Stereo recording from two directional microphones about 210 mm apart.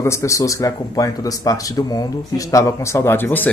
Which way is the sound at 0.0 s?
15° left (ahead or behind).